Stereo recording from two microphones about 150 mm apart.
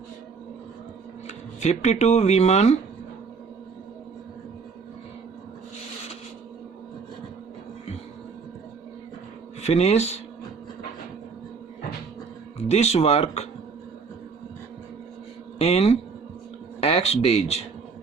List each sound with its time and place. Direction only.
1.6 s speech: 50° left (ahead or behind)
9.6 s speech: 45° left (ahead or behind)
12.6 s speech: 45° left (ahead or behind)
15.5 s speech: 45° left (ahead or behind)